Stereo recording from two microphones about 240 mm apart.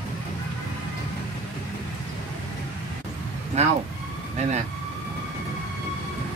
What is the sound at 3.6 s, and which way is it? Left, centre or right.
Vehicle, right.